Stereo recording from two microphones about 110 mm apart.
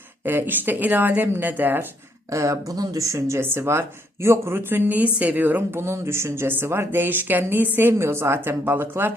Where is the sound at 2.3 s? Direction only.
30° right (ahead or behind).